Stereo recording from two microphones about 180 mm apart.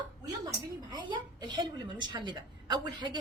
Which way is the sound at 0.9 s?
25° right (ahead or behind).